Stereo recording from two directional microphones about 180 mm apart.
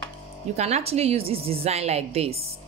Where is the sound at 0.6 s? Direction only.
35° right (ahead or behind).